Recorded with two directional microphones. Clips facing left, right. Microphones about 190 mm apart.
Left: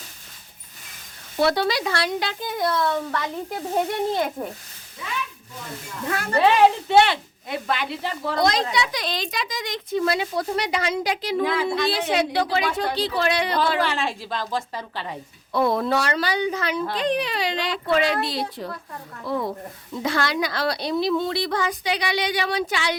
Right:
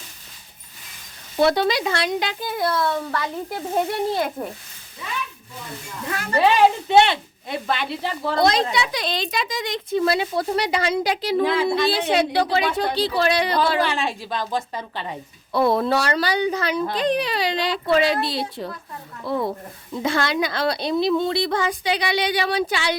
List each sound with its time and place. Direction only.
1.4 s speech: 20° right (ahead or behind)
2.4 s speech: 5° right (ahead or behind)
6.8 s a woman's voice: 25° right (ahead or behind)
13.8 s a woman's voice: 15° right (ahead or behind)
15.5 s a woman's voice: 30° right (ahead or behind)